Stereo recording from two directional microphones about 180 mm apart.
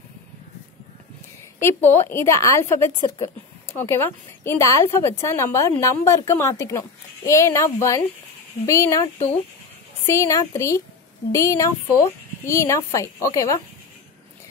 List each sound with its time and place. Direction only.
1.6 s a woman's voice: 10° left (ahead or behind)
10.0 s a woman's voice: 15° left (ahead or behind)